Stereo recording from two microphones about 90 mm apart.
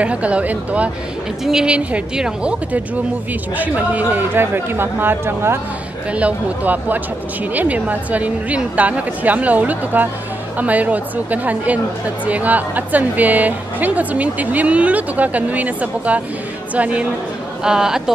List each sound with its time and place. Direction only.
0.0 s a woman's voice: 15° right (ahead or behind)
6.1 s a woman's voice: 15° right (ahead or behind)